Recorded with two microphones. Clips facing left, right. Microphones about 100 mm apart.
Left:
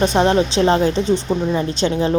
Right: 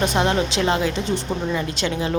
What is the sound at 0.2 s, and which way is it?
A woman's voice, 30° left (ahead or behind).